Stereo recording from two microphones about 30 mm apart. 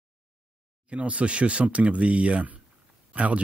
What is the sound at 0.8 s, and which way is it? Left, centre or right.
Speech, right.